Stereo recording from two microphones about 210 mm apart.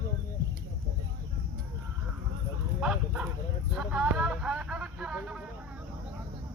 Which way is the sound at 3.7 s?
5° right (ahead or behind).